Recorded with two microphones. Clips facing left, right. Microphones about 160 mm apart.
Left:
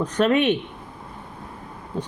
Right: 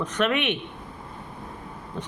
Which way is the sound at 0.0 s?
35° left (ahead or behind).